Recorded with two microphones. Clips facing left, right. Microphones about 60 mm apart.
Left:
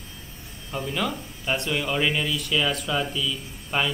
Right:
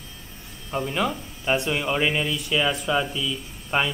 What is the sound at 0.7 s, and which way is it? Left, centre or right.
Speech, centre.